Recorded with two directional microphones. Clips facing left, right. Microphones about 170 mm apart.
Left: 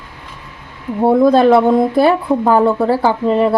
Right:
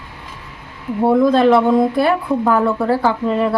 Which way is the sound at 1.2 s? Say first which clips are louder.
Left 3 dB; 35° left (ahead or behind).